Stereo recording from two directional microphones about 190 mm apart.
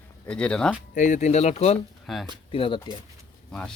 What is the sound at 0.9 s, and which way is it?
Speech, 40° left (ahead or behind).